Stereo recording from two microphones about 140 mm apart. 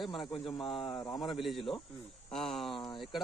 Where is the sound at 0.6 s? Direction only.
35° left (ahead or behind).